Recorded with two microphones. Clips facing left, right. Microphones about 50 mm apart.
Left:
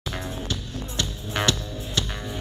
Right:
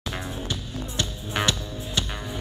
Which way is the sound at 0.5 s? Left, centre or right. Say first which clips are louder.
Even; centre.